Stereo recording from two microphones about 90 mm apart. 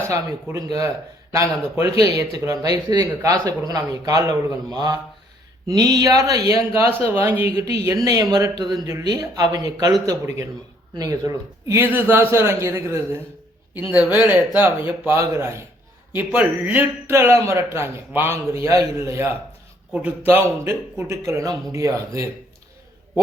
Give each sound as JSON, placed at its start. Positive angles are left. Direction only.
{"t": 0.0, "sound": "a man's voice", "side_deg": -35}
{"t": 4.7, "sound": "a man's voice", "side_deg": -45}
{"t": 6.7, "sound": "a man's voice", "side_deg": -25}
{"t": 8.0, "sound": "a man's voice", "side_deg": -40}
{"t": 9.0, "sound": "a man's voice", "side_deg": -40}
{"t": 10.9, "sound": "a man's voice", "side_deg": -40}
{"t": 11.8, "sound": "a man's voice", "side_deg": -25}
{"t": 13.9, "sound": "a man's voice", "side_deg": -15}
{"t": 16.1, "sound": "a man's voice", "side_deg": -15}
{"t": 19.9, "sound": "a man's voice", "side_deg": -15}